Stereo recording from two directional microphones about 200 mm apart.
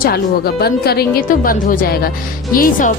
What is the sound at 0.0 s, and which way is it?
A woman's voice, 50° left (ahead or behind).